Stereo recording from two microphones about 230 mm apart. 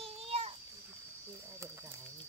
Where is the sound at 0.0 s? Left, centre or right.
Right.